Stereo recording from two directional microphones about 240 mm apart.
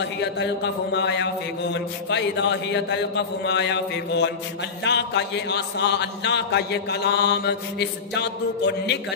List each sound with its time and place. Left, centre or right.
0.9 s a man's voice: left